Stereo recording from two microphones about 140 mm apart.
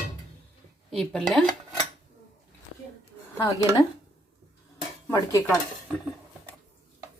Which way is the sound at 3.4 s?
20° left (ahead or behind).